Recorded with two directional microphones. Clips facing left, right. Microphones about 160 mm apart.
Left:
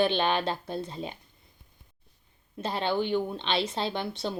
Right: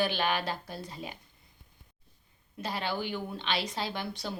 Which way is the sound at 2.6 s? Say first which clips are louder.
Left 5 dB; 25° left (ahead or behind).